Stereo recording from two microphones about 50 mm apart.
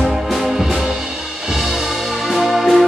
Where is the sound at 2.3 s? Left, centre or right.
Centre.